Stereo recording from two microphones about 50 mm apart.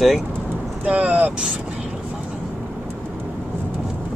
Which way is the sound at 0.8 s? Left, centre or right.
Right.